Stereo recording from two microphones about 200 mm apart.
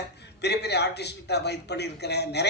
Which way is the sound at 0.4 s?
55° left (ahead or behind).